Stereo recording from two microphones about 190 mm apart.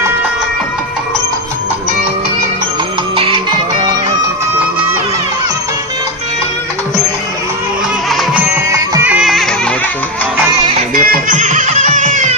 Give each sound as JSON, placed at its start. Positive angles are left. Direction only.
{"t": 3.2, "sound": "music", "side_deg": -30}
{"t": 8.1, "sound": "music", "side_deg": -5}
{"t": 10.9, "sound": "music", "side_deg": -45}